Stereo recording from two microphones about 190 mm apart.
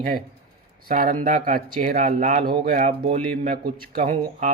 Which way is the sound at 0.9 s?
45° right (ahead or behind).